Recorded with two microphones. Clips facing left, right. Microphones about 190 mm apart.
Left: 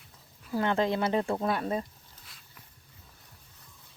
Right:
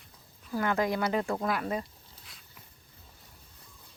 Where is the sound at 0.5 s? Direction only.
25° left (ahead or behind).